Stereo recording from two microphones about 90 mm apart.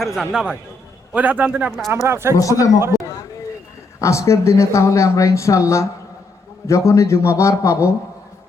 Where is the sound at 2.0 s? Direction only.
30° right (ahead or behind).